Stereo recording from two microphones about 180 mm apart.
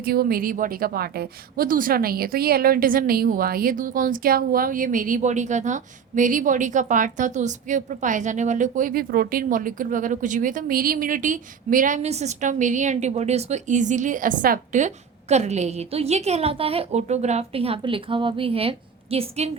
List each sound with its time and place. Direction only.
0.0 s a woman's voice: 55° right (ahead or behind); by 19.5 s 35° right (ahead or behind)